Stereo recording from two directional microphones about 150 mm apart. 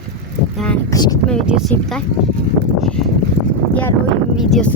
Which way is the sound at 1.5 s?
5° right (ahead or behind).